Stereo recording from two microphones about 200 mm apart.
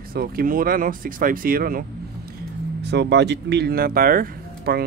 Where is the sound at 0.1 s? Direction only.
45° right (ahead or behind).